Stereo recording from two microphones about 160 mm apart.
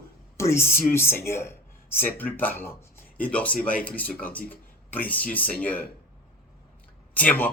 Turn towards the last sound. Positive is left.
turn(degrees=10)  # may be behind; listen again after turning